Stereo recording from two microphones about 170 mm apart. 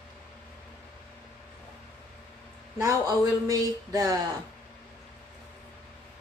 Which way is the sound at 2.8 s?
20° right (ahead or behind).